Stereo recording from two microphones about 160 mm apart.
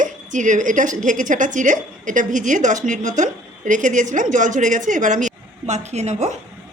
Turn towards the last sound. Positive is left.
turn(degrees=-45)  # may be behind; listen again after turning